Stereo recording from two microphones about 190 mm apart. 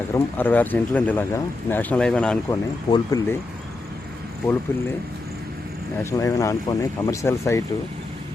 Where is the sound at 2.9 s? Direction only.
20° left (ahead or behind).